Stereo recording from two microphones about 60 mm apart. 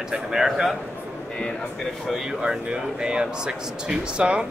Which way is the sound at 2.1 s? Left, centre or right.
Centre.